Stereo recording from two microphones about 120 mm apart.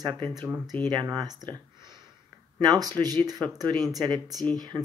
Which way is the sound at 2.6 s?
30° right (ahead or behind).